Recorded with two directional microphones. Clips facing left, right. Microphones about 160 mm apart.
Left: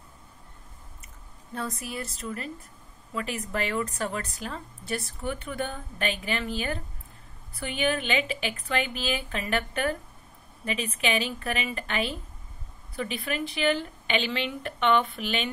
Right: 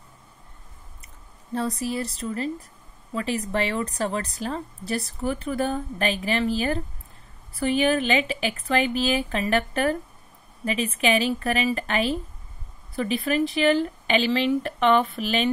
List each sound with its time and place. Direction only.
1.5 s a woman's voice: 30° right (ahead or behind)